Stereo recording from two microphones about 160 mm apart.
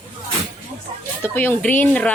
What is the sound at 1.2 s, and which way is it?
Speech, 10° left (ahead or behind).